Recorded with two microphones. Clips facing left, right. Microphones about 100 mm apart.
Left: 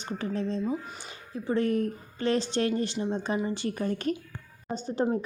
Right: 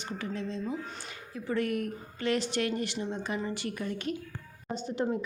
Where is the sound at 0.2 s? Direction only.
40° left (ahead or behind).